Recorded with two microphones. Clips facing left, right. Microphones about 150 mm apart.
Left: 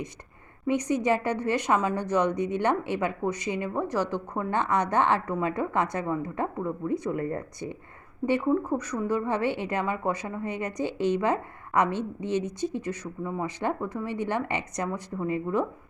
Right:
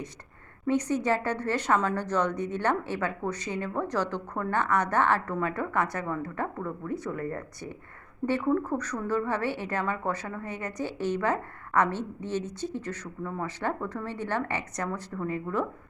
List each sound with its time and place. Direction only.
0.7 s a woman's voice: 15° left (ahead or behind)